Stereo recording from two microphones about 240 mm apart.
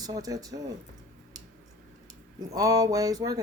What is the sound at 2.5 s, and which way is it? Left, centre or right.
Speech, centre.